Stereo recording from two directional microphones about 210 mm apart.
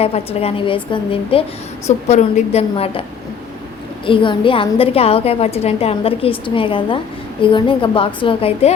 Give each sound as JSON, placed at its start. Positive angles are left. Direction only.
{"t": 0.0, "sound": "a woman's voice", "side_deg": 30}
{"t": 4.0, "sound": "a woman's voice", "side_deg": 25}